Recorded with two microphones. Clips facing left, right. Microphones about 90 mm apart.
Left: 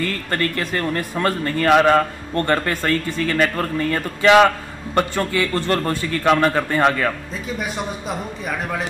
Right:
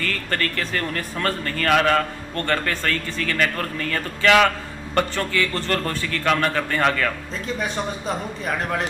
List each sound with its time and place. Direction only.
0.0 s a man's voice: 20° left (ahead or behind)
7.4 s speech: 5° left (ahead or behind)